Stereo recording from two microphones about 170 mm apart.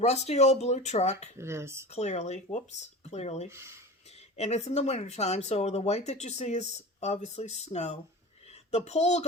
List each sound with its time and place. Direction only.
0.0 s speech: 40° left (ahead or behind)
1.4 s speech: 15° right (ahead or behind)
1.9 s speech: 40° left (ahead or behind)
3.5 s speech: 15° right (ahead or behind)
4.4 s speech: 40° left (ahead or behind)